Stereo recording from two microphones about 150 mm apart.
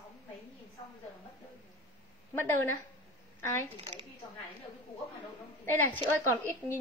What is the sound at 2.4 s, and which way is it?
Speech, 15° left (ahead or behind).